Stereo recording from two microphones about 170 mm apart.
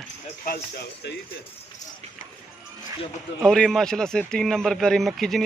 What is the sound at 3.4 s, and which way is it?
Speech, 5° left (ahead or behind).